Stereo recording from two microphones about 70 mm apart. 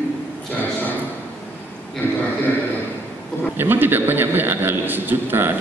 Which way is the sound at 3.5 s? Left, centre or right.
Right.